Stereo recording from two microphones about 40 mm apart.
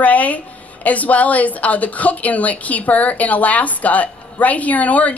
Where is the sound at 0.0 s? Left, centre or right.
Left.